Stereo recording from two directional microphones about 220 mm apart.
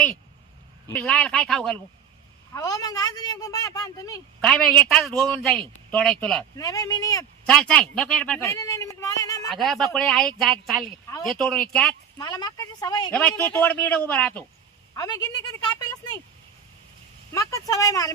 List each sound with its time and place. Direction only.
0.9 s speech: 5° left (ahead or behind)
2.5 s speech: 15° left (ahead or behind)
4.4 s speech: 5° left (ahead or behind)
6.6 s speech: 15° left (ahead or behind)
7.4 s speech: 5° left (ahead or behind)
9.5 s speech: centre (ahead or behind)
12.1 s speech: 20° left (ahead or behind)
13.1 s speech: 5° left (ahead or behind)
14.9 s speech: 15° left (ahead or behind)
17.3 s speech: 15° left (ahead or behind)